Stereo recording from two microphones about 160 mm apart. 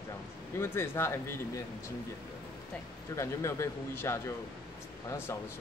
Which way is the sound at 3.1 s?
15° left (ahead or behind).